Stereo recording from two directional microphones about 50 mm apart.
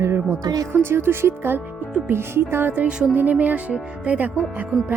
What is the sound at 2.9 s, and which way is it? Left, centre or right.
Speech, right.